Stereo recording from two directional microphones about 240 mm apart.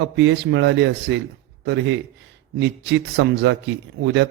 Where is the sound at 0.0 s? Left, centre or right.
Right.